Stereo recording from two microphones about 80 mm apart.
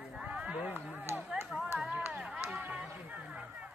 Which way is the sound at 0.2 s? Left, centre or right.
Centre.